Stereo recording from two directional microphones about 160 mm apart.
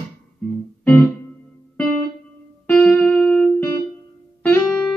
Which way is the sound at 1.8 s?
10° left (ahead or behind).